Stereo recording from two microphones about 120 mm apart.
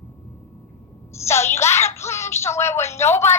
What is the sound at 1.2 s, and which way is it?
Speech, 20° left (ahead or behind).